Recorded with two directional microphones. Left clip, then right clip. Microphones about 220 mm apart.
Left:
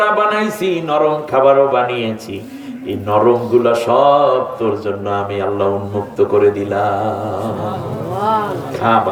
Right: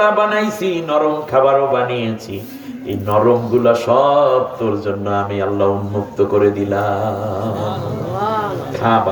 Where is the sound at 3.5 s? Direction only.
55° left (ahead or behind).